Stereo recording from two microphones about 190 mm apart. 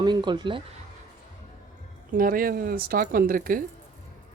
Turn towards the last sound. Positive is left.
turn(degrees=-45)  # may be behind; listen again after turning